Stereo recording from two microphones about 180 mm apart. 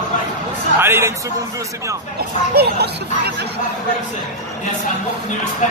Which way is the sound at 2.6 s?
60° right (ahead or behind).